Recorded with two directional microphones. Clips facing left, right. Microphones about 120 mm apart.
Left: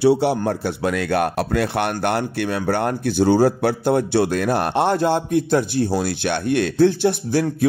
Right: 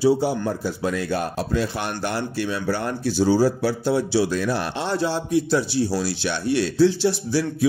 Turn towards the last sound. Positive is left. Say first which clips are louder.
# left 2 dB
turn(degrees=50)  # may be behind; listen again after turning